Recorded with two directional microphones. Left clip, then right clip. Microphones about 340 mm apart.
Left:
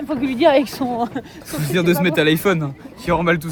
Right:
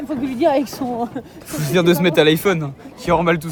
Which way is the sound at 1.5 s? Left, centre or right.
Centre.